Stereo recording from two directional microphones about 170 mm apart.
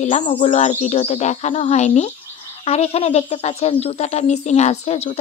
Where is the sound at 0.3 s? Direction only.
40° left (ahead or behind).